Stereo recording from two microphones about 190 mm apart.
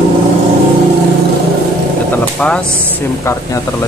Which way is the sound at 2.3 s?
5° left (ahead or behind).